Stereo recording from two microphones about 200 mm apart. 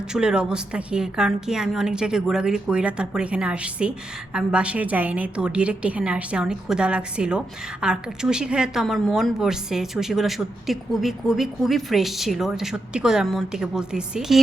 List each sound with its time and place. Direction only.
0.1 s a woman's voice: 5° right (ahead or behind)